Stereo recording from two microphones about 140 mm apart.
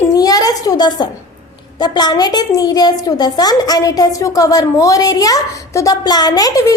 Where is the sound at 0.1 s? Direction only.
25° left (ahead or behind).